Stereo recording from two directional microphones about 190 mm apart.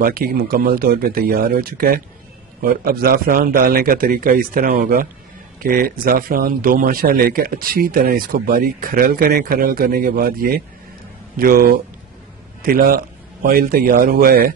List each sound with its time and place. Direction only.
0.0 s a man's voice: 50° right (ahead or behind)